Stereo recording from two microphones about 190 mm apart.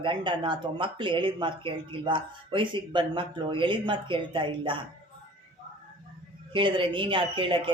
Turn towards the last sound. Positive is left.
turn(degrees=-25)  # may be behind; listen again after turning